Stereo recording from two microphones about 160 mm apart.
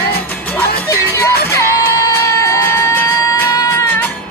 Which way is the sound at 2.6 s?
15° left (ahead or behind).